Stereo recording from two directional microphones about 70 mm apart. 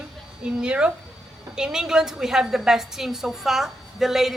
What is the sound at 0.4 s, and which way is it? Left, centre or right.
A woman's voice, centre.